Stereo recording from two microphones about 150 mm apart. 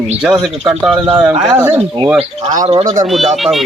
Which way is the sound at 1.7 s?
35° right (ahead or behind).